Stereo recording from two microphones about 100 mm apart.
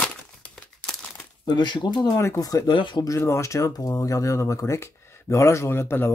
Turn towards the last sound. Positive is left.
turn(degrees=25)  # may be behind; listen again after turning